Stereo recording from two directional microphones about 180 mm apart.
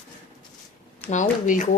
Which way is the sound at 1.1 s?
45° left (ahead or behind).